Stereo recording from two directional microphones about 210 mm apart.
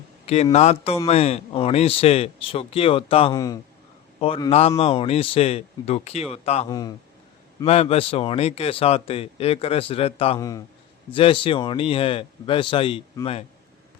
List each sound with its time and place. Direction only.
0.5 s speech: 30° left (ahead or behind)
6.7 s speech: 20° left (ahead or behind)